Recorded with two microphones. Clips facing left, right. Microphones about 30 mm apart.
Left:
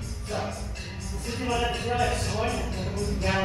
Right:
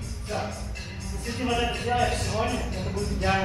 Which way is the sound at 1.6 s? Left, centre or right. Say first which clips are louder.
Right 1 dB; centre.